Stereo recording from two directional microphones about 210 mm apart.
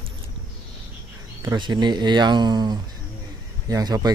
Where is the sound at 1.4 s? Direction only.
20° right (ahead or behind).